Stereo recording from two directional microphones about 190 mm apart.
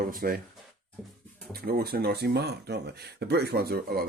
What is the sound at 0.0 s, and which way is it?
Speech, 50° right (ahead or behind).